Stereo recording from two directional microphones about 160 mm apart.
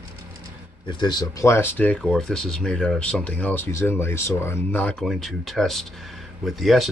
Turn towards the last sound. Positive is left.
turn(degrees=0)  # may be behind; listen again after turning